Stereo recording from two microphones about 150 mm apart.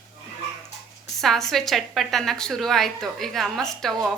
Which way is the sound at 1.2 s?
Centre (ahead or behind).